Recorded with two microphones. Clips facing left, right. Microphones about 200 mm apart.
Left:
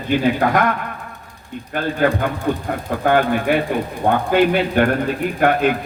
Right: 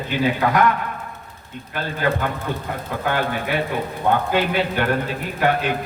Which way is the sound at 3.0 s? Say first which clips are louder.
Left 7 dB; 50° left (ahead or behind).